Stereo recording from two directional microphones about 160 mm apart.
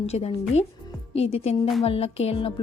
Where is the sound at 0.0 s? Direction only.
40° left (ahead or behind).